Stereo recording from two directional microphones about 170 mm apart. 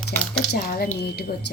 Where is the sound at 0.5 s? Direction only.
60° left (ahead or behind).